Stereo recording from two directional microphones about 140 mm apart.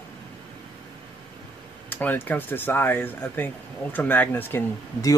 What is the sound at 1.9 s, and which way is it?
Speech, 15° left (ahead or behind).